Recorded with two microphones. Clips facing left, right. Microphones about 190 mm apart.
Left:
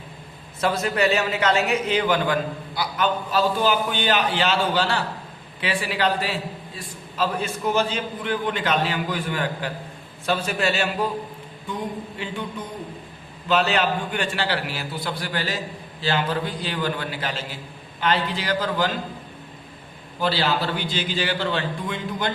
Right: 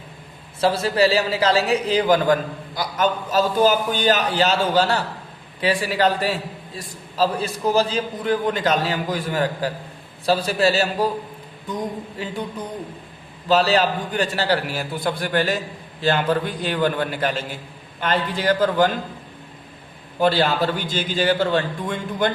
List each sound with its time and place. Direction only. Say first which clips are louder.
0.6 s a man's voice: right 4 dB; 30° right (ahead or behind)
12.1 s a man's voice: right 2 dB; 40° right (ahead or behind)
20.2 s a man's voice: right 5 dB; 50° right (ahead or behind)